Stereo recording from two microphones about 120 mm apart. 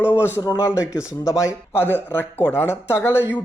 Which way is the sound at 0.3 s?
25° left (ahead or behind).